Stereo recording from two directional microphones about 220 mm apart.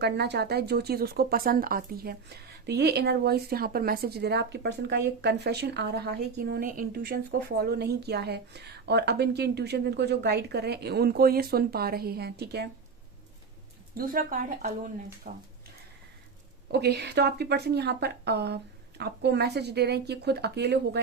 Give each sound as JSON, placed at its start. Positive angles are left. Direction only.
{"t": 0.0, "sound": "speech", "side_deg": -50}
{"t": 13.9, "sound": "speech", "side_deg": -40}
{"t": 16.7, "sound": "speech", "side_deg": -50}